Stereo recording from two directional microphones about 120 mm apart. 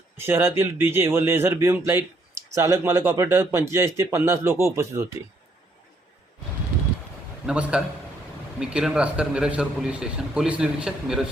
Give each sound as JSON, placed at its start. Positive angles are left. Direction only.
{"t": 0.2, "sound": "speech", "side_deg": -20}
{"t": 7.4, "sound": "a man's voice", "side_deg": -10}